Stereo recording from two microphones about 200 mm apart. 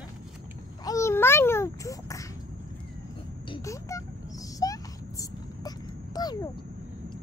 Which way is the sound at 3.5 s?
15° left (ahead or behind).